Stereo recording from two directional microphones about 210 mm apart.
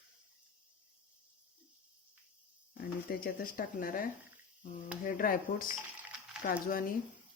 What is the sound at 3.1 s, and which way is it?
Speech, 45° left (ahead or behind).